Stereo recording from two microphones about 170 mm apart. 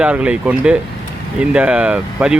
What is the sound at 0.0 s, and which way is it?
Speech, 5° right (ahead or behind).